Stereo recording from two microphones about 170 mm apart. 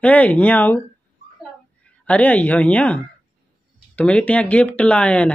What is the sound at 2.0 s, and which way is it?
Speech, 10° left (ahead or behind).